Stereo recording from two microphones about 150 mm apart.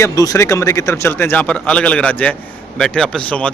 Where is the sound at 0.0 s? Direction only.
20° left (ahead or behind).